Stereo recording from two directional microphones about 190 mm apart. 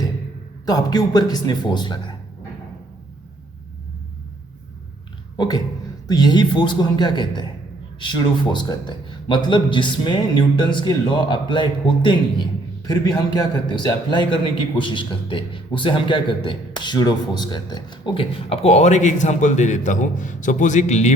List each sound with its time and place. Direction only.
0.6 s a man's voice: 20° left (ahead or behind)
5.4 s a sound: 20° left (ahead or behind)
6.1 s a man's voice: 20° left (ahead or behind); by 21.2 s 35° left (ahead or behind)